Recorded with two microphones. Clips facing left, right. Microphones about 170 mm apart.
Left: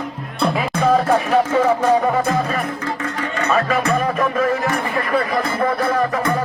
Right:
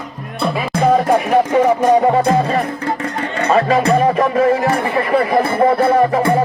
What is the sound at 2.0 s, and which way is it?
Music, 30° right (ahead or behind).